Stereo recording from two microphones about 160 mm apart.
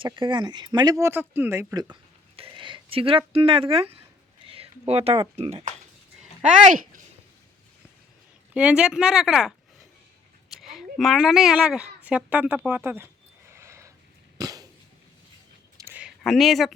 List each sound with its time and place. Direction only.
0.0 s speech: 30° right (ahead or behind)
4.4 s a sound: 35° right (ahead or behind)
5.4 s speech: 40° right (ahead or behind)
6.4 s speech: 55° right (ahead or behind)
8.5 s speech: 5° right (ahead or behind)
10.5 s a woman's voice: centre (ahead or behind)
13.5 s a sound: 15° right (ahead or behind)
14.3 s cough: 20° right (ahead or behind)
15.8 s a sound: 10° right (ahead or behind)